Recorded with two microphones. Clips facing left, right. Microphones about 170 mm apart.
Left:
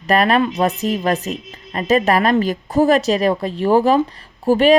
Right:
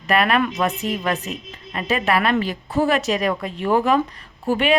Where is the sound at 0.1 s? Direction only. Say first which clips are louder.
Left 3 dB; 35° left (ahead or behind).